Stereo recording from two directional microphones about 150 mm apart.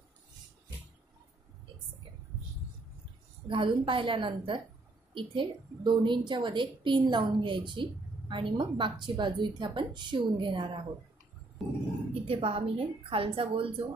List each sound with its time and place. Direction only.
3.4 s a woman's voice: 35° right (ahead or behind)
11.6 s speech: centre (ahead or behind)
12.1 s a woman's voice: 40° right (ahead or behind)